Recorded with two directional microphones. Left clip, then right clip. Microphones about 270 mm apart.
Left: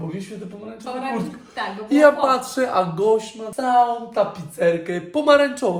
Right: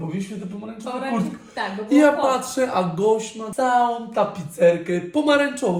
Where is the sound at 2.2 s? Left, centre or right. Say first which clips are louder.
Left 1 dB; centre.